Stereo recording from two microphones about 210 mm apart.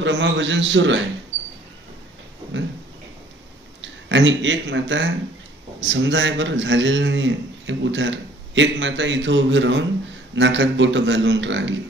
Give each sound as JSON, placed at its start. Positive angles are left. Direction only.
{"t": 0.0, "sound": "a man's voice", "side_deg": -60}
{"t": 3.8, "sound": "a man's voice", "side_deg": -60}